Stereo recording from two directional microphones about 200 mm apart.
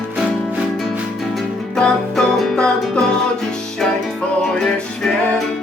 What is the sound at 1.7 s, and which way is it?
Music, 5° left (ahead or behind).